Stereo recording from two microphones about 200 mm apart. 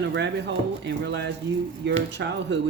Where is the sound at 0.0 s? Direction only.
60° right (ahead or behind).